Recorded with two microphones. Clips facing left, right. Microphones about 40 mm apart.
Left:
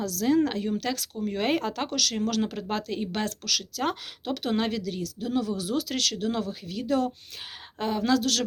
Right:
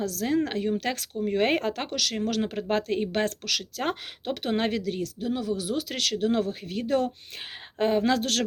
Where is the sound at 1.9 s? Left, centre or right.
Centre.